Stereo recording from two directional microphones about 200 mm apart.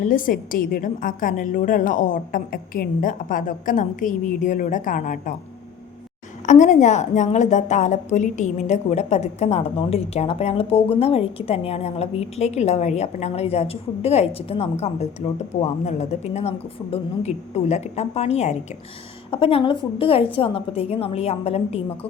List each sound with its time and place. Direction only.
0.0 s a woman's voice: 45° left (ahead or behind)
6.4 s a woman's voice: 35° left (ahead or behind)